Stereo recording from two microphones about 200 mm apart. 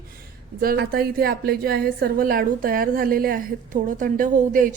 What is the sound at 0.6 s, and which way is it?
A woman's voice, 50° right (ahead or behind).